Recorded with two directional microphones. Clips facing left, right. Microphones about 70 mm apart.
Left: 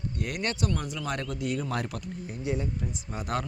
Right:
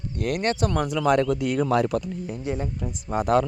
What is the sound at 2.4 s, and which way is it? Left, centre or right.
Speech, right.